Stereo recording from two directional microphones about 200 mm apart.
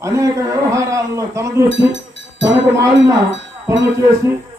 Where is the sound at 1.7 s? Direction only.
65° right (ahead or behind).